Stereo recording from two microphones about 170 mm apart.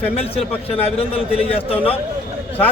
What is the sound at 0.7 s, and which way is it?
A man's voice, 35° left (ahead or behind).